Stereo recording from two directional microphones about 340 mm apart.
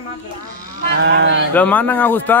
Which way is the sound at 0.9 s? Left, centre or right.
Right.